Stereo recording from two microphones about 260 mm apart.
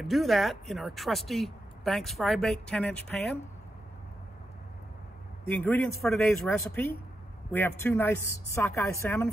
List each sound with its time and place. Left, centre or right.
0.0 s speech: centre
5.5 s a woman's voice: centre